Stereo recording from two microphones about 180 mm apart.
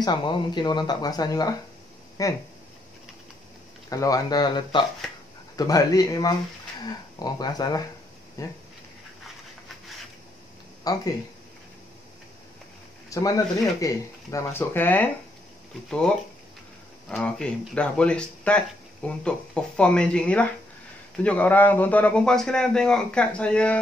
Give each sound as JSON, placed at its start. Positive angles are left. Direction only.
{"t": 0.0, "sound": "speech", "side_deg": 25}
{"t": 3.9, "sound": "a man's voice", "side_deg": 20}
{"t": 10.8, "sound": "speech", "side_deg": 20}
{"t": 13.1, "sound": "a man's voice", "side_deg": 20}